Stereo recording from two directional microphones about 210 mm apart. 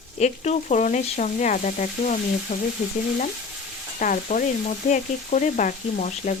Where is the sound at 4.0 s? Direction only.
40° left (ahead or behind).